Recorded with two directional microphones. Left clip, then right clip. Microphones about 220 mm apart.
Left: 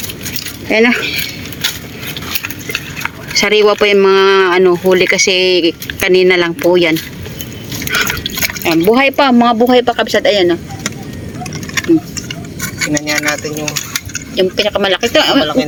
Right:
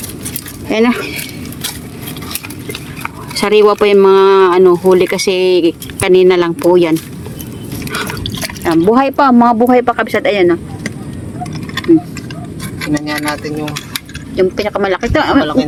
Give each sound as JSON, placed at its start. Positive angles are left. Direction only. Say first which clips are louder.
{"t": 0.7, "sound": "speech", "louder": "left 2 dB", "side_deg": -5}
{"t": 1.0, "sound": "speech", "louder": "left 5 dB", "side_deg": -35}
{"t": 3.3, "sound": "speech", "louder": "right 1 dB", "side_deg": -10}
{"t": 7.9, "sound": "drip", "louder": "left 6 dB", "side_deg": -5}
{"t": 8.6, "sound": "speech", "louder": "even", "side_deg": 0}
{"t": 12.9, "sound": "speech", "louder": "left 1 dB", "side_deg": -10}
{"t": 14.3, "sound": "speech", "louder": "left 1 dB", "side_deg": 5}